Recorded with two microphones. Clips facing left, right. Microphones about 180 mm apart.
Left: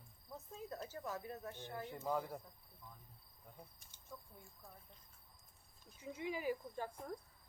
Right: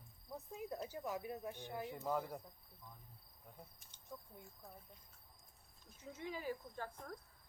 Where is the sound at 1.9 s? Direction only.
Centre (ahead or behind).